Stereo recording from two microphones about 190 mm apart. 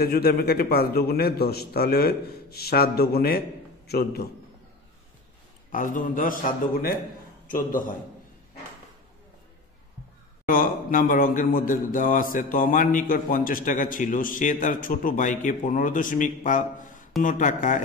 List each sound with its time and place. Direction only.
0.0 s a man's voice: 55° left (ahead or behind)
5.7 s a man's voice: 45° left (ahead or behind)
10.4 s a man's voice: 45° left (ahead or behind)